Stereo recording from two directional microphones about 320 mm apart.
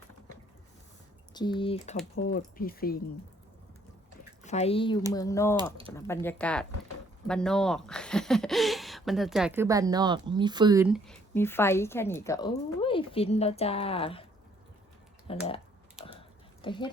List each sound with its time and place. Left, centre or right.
1.3 s speech: centre
4.4 s speech: centre
15.3 s speech: centre
16.6 s speech: centre